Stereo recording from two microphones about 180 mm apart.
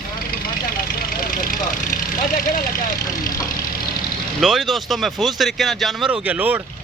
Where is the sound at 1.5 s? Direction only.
50° left (ahead or behind).